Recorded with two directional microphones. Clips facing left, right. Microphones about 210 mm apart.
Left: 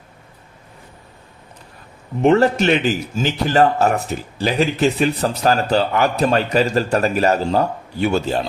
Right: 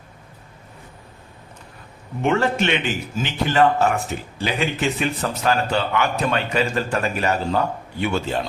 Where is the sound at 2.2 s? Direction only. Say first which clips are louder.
Left 6 dB; 35° left (ahead or behind).